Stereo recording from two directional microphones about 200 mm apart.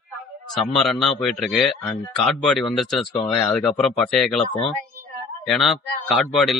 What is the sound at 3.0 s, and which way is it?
Speech, 25° left (ahead or behind).